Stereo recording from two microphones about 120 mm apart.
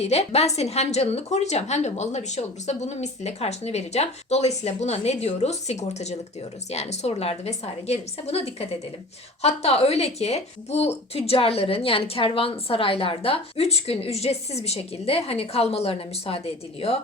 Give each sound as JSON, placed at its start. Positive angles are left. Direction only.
{"t": 0.0, "sound": "a woman's voice", "side_deg": 60}